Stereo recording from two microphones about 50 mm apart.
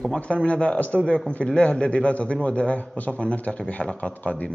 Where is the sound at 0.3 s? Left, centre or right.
Left.